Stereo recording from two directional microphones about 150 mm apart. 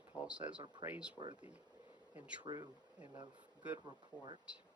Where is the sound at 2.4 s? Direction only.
30° right (ahead or behind).